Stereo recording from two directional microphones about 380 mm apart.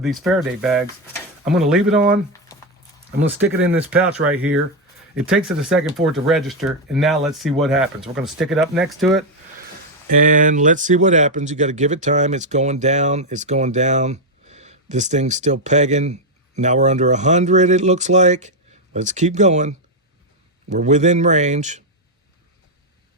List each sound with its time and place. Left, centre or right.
0.0 s speech: centre
3.8 s speech: centre
4.3 s speech: right
5.1 s speech: centre
10.1 s speech: right